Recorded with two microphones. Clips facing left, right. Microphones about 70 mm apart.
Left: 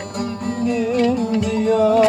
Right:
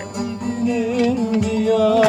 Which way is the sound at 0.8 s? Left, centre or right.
Left.